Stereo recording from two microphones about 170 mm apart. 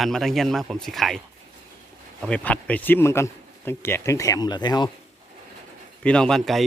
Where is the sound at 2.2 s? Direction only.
5° left (ahead or behind); by 4.9 s 25° left (ahead or behind).